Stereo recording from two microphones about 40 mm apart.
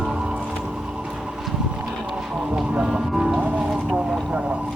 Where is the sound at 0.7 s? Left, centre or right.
Right.